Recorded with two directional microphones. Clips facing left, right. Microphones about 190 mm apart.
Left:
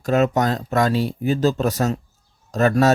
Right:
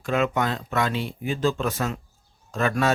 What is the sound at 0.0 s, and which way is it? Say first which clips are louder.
Speech: left 5 dB; 40° left (ahead or behind).